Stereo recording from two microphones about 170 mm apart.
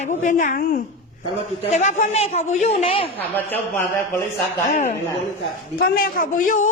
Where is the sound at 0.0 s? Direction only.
45° left (ahead or behind).